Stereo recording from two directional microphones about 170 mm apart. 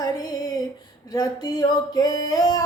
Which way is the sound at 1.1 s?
20° left (ahead or behind).